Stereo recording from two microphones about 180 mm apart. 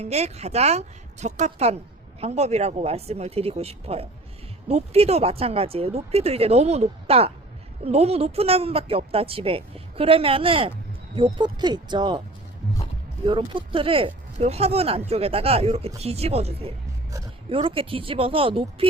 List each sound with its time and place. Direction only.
0.0 s a woman's voice: 35° right (ahead or behind)
13.2 s a woman's voice: 30° right (ahead or behind)